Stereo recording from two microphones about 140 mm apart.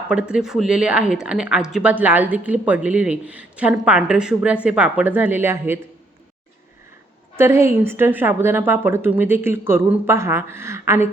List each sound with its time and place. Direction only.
0.1 s speech: 5° right (ahead or behind)
7.3 s speech: 20° right (ahead or behind)